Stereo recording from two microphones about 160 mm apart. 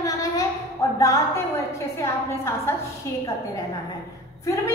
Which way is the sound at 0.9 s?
20° left (ahead or behind).